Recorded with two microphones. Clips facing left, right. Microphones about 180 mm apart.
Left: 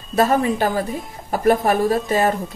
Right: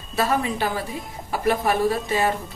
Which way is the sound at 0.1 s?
45° left (ahead or behind).